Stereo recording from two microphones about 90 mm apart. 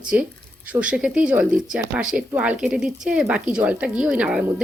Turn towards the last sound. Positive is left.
turn(degrees=-10)  # may be behind; listen again after turning